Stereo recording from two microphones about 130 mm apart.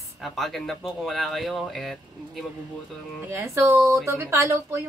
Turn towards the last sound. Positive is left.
turn(degrees=-20)  # may be behind; listen again after turning